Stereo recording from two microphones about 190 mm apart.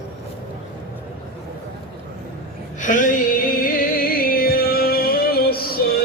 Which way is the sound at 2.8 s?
45° left (ahead or behind).